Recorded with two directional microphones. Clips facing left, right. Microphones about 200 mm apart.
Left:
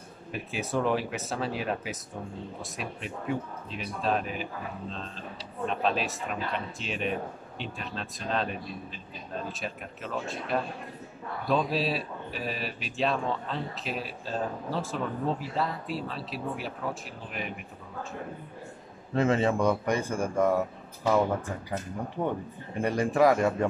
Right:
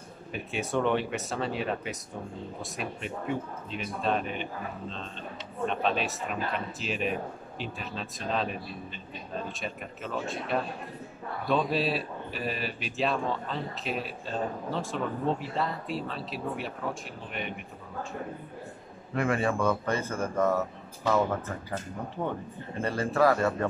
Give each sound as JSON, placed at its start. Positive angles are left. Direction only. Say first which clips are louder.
{"t": 0.3, "sound": "speech", "louder": "even", "side_deg": 0}
{"t": 19.1, "sound": "a man's voice", "louder": "left 3 dB", "side_deg": 25}
{"t": 22.8, "sound": "a man's voice", "louder": "left 2 dB", "side_deg": 15}